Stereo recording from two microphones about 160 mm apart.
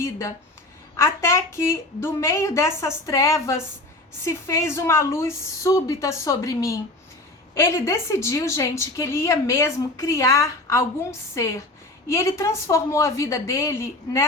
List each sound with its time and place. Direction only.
0.0 s a woman's voice: 15° left (ahead or behind)